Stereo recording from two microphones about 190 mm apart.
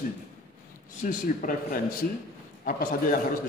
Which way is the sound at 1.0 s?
45° left (ahead or behind).